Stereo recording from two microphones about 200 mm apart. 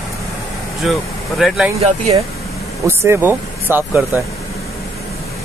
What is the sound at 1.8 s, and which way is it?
Speech, 30° right (ahead or behind).